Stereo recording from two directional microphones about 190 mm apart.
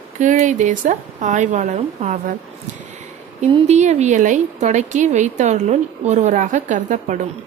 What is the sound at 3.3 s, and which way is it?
A woman's voice, 30° right (ahead or behind).